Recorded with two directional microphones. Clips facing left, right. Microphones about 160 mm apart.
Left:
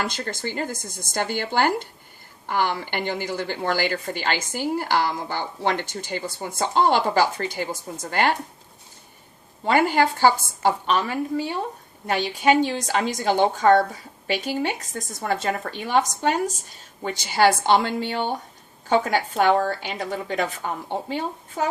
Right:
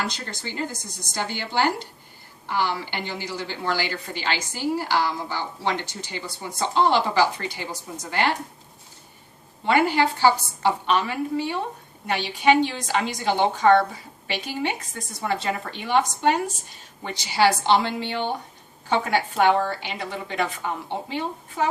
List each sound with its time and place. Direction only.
0.1 s a woman's voice: 50° left (ahead or behind)
9.6 s a woman's voice: 45° left (ahead or behind)